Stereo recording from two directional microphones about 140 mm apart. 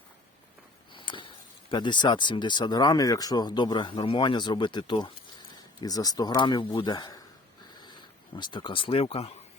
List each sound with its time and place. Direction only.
0.9 s a sound: 35° left (ahead or behind)
1.7 s speech: 35° left (ahead or behind)
8.4 s speech: 35° left (ahead or behind)